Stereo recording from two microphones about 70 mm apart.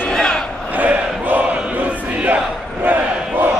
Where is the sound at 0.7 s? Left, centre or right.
Right.